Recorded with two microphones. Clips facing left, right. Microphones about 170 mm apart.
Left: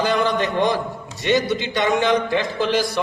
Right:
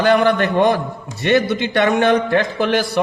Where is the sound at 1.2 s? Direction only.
65° right (ahead or behind).